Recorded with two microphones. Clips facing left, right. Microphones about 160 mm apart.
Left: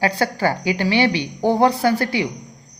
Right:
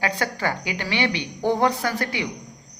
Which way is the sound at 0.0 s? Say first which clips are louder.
Left 6 dB; 35° left (ahead or behind).